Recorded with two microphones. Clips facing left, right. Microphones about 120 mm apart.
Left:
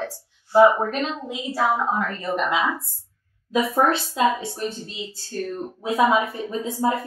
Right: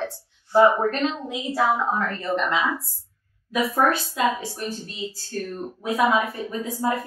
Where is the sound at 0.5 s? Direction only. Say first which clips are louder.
Left 2 dB; 5° left (ahead or behind).